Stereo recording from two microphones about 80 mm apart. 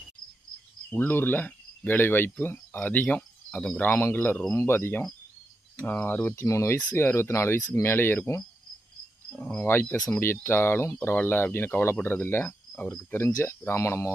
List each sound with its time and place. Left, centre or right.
0.9 s speech: left
6.4 s speech: left
9.3 s speech: centre
9.6 s speech: left